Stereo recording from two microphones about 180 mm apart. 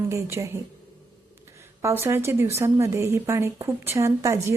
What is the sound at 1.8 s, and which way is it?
A woman's voice, 15° right (ahead or behind).